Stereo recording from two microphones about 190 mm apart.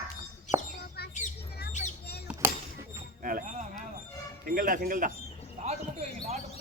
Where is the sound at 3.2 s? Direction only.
45° right (ahead or behind).